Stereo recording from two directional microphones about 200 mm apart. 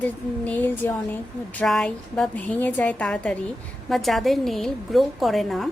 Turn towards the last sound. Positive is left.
turn(degrees=0)  # may be behind; listen again after turning